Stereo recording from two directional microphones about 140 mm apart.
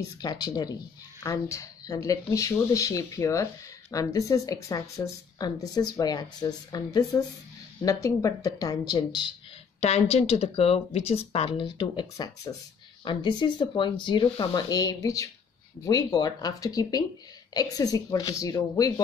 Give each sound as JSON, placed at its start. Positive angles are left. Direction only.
{"t": 0.2, "sound": "speech", "side_deg": 30}
{"t": 9.8, "sound": "speech", "side_deg": 50}